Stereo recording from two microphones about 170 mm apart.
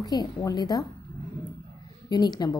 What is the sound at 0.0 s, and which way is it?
Speech, 25° left (ahead or behind).